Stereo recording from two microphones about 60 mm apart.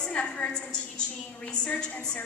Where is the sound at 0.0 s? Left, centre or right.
Centre.